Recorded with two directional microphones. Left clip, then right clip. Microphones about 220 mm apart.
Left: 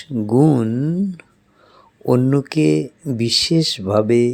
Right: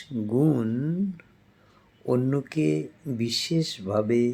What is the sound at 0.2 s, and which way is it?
Speech, 35° left (ahead or behind).